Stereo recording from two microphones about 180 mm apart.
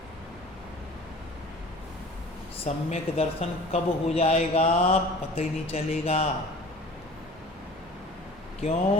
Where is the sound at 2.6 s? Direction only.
40° left (ahead or behind).